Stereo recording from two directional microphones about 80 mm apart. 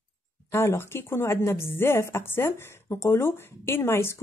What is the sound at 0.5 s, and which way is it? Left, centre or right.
A woman's voice, left.